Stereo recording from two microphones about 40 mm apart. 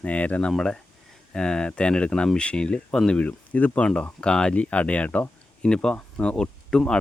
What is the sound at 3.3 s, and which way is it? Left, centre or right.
Speech, left.